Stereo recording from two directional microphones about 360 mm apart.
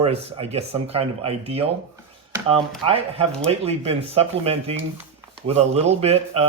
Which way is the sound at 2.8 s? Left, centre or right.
Centre.